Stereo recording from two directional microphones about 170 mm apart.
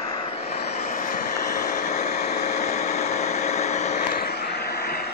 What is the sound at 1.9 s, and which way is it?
Vehicle, 40° left (ahead or behind).